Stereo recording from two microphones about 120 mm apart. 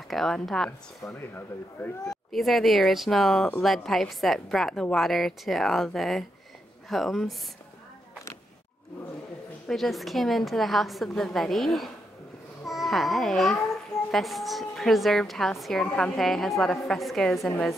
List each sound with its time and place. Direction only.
0.1 s a woman's voice: centre (ahead or behind)
1.0 s speech: 15° left (ahead or behind)
2.0 s a woman's voice: centre (ahead or behind)
9.7 s a woman's voice: centre (ahead or behind)